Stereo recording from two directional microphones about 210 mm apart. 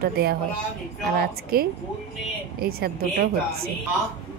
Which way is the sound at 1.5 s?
45° right (ahead or behind).